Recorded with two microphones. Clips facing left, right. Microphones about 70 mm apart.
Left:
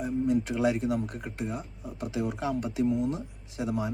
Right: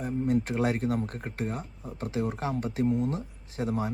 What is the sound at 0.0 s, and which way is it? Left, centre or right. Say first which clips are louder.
Speech: left 1 dB; right.